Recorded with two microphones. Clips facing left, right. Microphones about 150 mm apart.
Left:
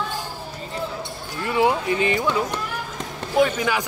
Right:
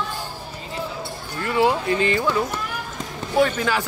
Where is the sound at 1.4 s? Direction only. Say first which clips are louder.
Even; 15° left (ahead or behind).